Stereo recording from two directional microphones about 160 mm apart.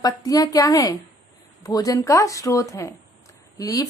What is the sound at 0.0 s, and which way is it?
Speech, 25° left (ahead or behind).